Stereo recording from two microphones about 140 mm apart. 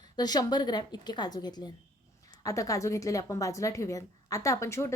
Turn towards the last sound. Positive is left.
turn(degrees=20)  # may be behind; listen again after turning